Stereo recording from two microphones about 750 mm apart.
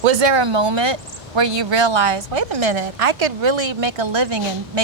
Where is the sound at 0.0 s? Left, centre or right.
Right.